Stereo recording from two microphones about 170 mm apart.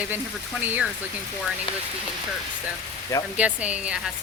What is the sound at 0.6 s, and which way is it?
Speech, 10° right (ahead or behind).